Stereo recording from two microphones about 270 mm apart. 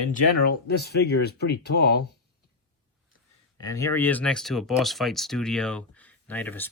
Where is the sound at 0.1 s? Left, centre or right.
Left.